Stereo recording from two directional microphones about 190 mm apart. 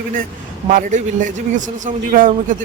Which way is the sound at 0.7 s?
45° right (ahead or behind).